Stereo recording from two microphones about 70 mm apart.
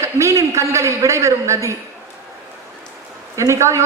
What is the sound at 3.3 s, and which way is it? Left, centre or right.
Speech, right.